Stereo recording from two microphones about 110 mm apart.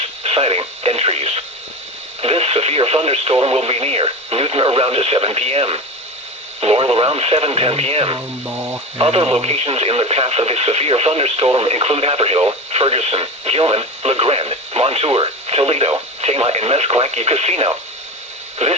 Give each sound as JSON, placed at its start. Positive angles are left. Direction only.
{"t": 0.2, "sound": "speech", "side_deg": -65}
{"t": 8.4, "sound": "speech", "side_deg": -15}
{"t": 9.0, "sound": "speech", "side_deg": -60}